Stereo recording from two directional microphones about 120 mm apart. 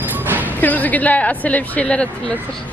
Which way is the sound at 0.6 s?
15° left (ahead or behind).